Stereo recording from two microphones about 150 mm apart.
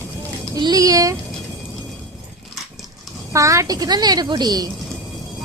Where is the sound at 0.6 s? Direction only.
25° right (ahead or behind).